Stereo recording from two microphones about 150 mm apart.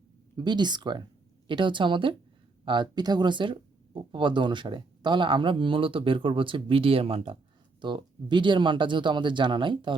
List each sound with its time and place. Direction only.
0.3 s speech: 30° right (ahead or behind)